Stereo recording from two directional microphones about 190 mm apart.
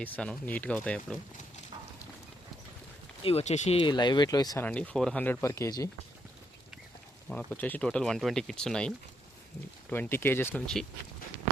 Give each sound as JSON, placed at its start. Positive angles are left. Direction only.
{"t": 0.0, "sound": "speech", "side_deg": 5}
{"t": 3.2, "sound": "speech", "side_deg": 35}
{"t": 4.6, "sound": "speech", "side_deg": 5}
{"t": 7.3, "sound": "speech", "side_deg": 5}
{"t": 9.9, "sound": "speech", "side_deg": 10}